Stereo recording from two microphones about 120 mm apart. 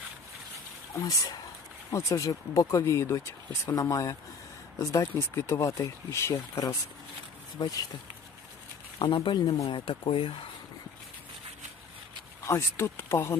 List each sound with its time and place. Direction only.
1.9 s speech: 25° left (ahead or behind)
7.6 s speech: 35° left (ahead or behind)
9.0 s speech: 45° left (ahead or behind)
12.5 s speech: 25° left (ahead or behind)